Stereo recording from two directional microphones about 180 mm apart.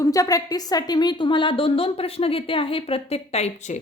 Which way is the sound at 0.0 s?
20° left (ahead or behind).